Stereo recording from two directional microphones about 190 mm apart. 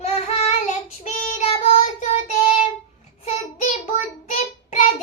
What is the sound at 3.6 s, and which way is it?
Child singing, 40° left (ahead or behind).